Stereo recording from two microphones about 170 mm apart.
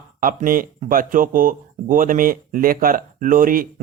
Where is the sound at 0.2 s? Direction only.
55° right (ahead or behind).